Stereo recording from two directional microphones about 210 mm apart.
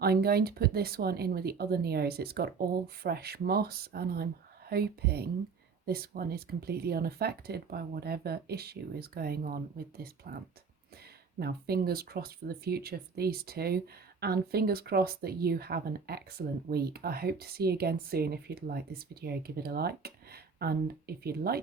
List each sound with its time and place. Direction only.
0.0 s speech: 50° right (ahead or behind)